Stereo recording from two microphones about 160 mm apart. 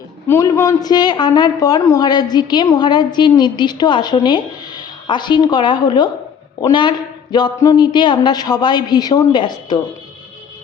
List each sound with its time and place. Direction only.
0.3 s a man's voice: 20° left (ahead or behind)